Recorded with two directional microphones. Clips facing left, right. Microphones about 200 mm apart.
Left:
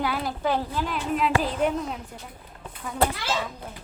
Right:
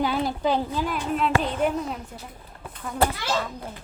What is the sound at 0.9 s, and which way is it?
A woman's voice, centre (ahead or behind).